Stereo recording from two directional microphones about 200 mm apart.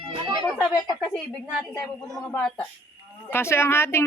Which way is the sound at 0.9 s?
Centre (ahead or behind).